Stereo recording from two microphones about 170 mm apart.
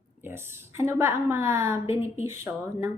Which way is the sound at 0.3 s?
15° right (ahead or behind).